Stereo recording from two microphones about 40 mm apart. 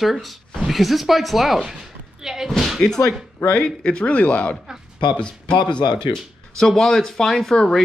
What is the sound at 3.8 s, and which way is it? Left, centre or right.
Speech, left.